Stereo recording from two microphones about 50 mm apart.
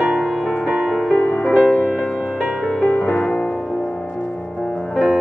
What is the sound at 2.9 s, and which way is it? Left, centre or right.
Music, left.